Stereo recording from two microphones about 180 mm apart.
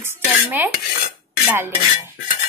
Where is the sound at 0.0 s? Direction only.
10° right (ahead or behind).